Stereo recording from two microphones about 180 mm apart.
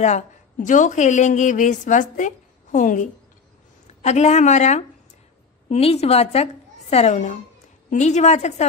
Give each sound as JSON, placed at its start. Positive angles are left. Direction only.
{"t": 0.0, "sound": "a woman's voice", "side_deg": 40}